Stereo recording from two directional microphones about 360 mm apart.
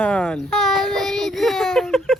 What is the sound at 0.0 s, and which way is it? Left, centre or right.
Child singing, centre.